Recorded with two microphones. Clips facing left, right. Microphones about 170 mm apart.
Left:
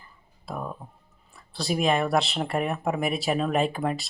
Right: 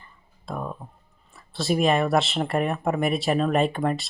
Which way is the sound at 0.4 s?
5° left (ahead or behind).